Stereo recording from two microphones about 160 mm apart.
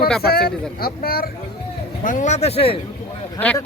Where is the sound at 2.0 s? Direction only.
50° left (ahead or behind); by 2.8 s 35° left (ahead or behind).